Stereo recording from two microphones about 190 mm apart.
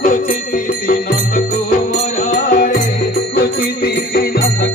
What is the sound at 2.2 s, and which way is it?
Music, 45° left (ahead or behind).